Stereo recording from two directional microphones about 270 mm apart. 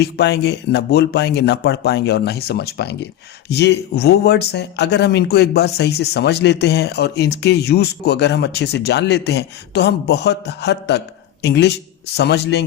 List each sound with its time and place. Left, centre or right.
0.0 s speech: left